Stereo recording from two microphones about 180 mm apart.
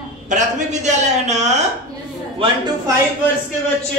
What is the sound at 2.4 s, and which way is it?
Speech, 30° right (ahead or behind).